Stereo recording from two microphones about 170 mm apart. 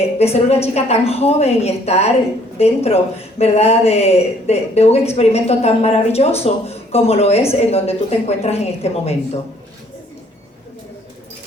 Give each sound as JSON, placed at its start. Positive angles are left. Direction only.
{"t": 0.0, "sound": "speech", "side_deg": 35}